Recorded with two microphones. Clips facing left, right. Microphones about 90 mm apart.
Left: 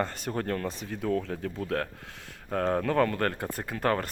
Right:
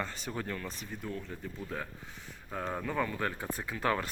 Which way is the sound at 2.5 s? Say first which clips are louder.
Left 9 dB; 65° left (ahead or behind).